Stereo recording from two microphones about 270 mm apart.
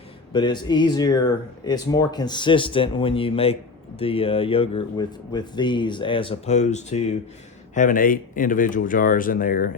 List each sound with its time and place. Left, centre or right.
0.3 s speech: centre